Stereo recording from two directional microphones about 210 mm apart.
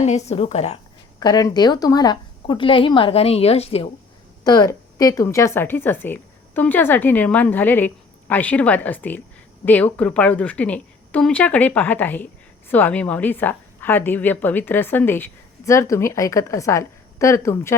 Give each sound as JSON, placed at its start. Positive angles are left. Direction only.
{"t": 0.3, "sound": "a woman's voice", "side_deg": 30}
{"t": 1.2, "sound": "a woman's voice", "side_deg": 20}
{"t": 4.4, "sound": "a woman's voice", "side_deg": 20}